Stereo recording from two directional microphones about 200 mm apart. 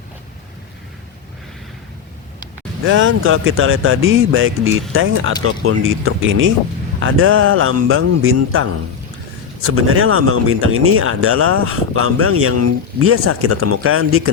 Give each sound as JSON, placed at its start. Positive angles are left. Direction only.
{"t": 2.8, "sound": "speech", "side_deg": -75}
{"t": 9.6, "sound": "speech", "side_deg": -90}